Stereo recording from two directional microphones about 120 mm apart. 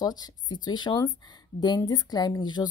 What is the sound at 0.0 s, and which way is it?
A woman's voice, 35° left (ahead or behind).